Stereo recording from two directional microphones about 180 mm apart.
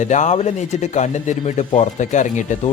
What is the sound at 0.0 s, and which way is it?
Speech, 40° left (ahead or behind).